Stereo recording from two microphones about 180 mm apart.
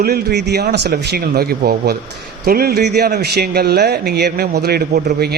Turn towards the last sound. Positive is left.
turn(degrees=-60)  # may be behind; listen again after turning